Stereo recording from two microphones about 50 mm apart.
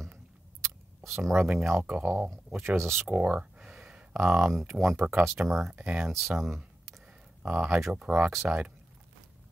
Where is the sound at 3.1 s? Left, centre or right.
Right.